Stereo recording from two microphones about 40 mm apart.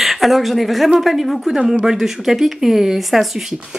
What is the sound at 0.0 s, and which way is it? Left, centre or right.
Speech, centre.